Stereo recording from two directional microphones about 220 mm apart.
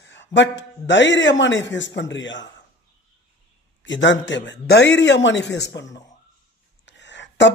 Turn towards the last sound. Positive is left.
turn(degrees=55)  # may be behind; listen again after turning